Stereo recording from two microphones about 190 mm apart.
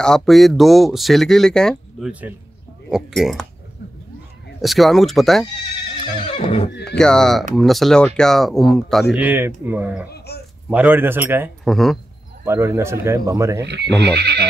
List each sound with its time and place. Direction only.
0.0 s speech: centre (ahead or behind)
4.6 s speech: centre (ahead or behind)
6.3 s neigh: 30° left (ahead or behind)
7.0 s speech: 5° left (ahead or behind)
9.1 s speech: 10° right (ahead or behind)
10.0 s a sound: 55° left (ahead or behind)
10.7 s speech: 10° right (ahead or behind)
11.6 s speech: centre (ahead or behind)
12.4 s speech: 15° right (ahead or behind)
13.7 s speech: 60° right (ahead or behind)